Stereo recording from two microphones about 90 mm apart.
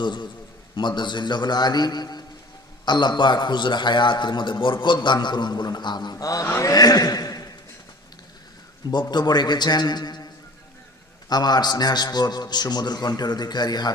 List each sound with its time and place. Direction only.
0.0 s a man's voice: 60° left (ahead or behind)
6.2 s a man's voice: 35° left (ahead or behind)
8.9 s a man's voice: 50° left (ahead or behind)
11.3 s a man's voice: 50° left (ahead or behind)